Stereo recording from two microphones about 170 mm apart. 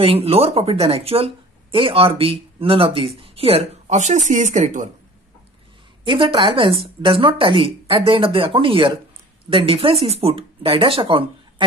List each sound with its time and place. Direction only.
0.0 s speech: 35° right (ahead or behind)
6.0 s speech: 30° right (ahead or behind)